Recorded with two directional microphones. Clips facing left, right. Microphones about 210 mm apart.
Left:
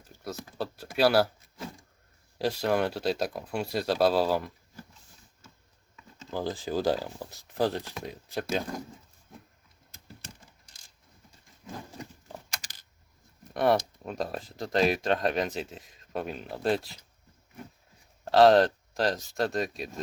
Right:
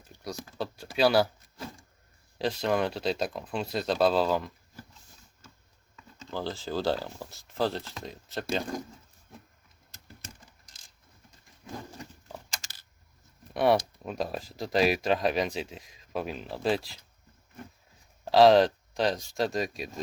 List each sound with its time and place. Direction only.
0.9 s speech: 5° left (ahead or behind)
6.2 s speech: 15° left (ahead or behind)
13.5 s speech: centre (ahead or behind)
18.3 s speech: centre (ahead or behind)